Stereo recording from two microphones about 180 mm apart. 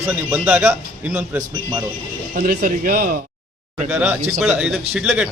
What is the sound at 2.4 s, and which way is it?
Speech, 50° right (ahead or behind).